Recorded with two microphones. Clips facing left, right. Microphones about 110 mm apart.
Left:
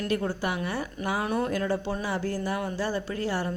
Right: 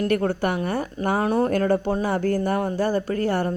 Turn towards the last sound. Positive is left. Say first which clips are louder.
# right 6 dB
turn(degrees=-50)  # may be behind; listen again after turning